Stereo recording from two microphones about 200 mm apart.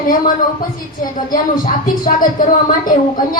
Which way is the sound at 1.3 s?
45° left (ahead or behind).